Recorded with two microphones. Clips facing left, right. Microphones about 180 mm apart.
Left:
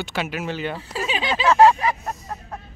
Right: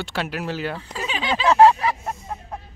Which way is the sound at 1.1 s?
15° left (ahead or behind).